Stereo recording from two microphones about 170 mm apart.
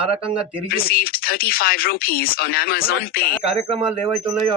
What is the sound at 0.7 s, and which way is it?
Speech, 60° left (ahead or behind).